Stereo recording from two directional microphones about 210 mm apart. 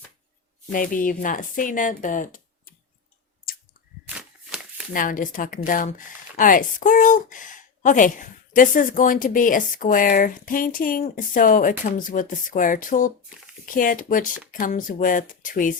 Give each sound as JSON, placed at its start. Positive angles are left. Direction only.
{"t": 0.7, "sound": "speech", "side_deg": 40}
{"t": 3.5, "sound": "a sound", "side_deg": 45}
{"t": 4.9, "sound": "speech", "side_deg": 40}